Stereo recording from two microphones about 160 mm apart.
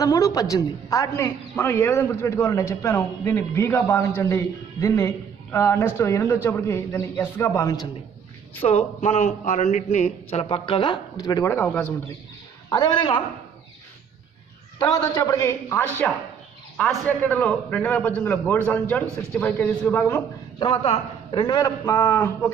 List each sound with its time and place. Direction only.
0.0 s a man's voice: 20° left (ahead or behind)
8.5 s a man's voice: 40° left (ahead or behind)
10.4 s a man's voice: 35° left (ahead or behind); by 11.9 s 15° left (ahead or behind)
12.6 s a man's voice: 25° left (ahead or behind)
14.8 s a man's voice: 20° left (ahead or behind)
16.8 s a man's voice: 5° left (ahead or behind)
20.5 s a man's voice: 35° left (ahead or behind); by 22.5 s 15° left (ahead or behind)